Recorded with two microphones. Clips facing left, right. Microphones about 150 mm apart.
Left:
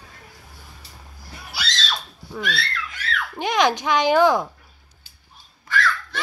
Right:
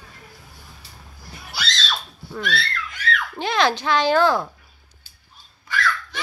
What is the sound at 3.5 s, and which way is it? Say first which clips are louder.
Speech: left 1 dB; 15° left (ahead or behind).